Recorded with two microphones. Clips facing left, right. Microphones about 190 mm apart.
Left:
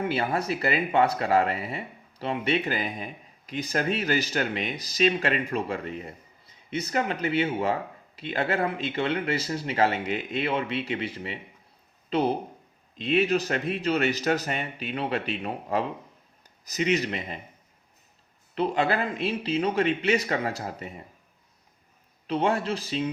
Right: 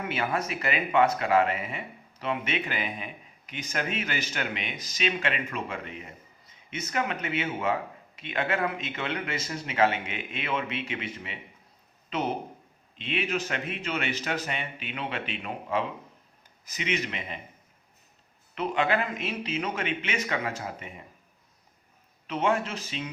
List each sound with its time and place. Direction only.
0.1 s speech: 35° left (ahead or behind)
18.5 s speech: 35° left (ahead or behind)
22.3 s speech: 35° left (ahead or behind)